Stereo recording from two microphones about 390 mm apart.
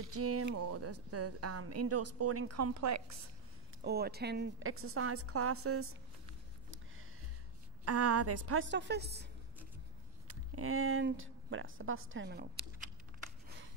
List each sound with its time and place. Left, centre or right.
0.1 s a woman's voice: right
3.8 s a woman's voice: right
7.8 s a woman's voice: right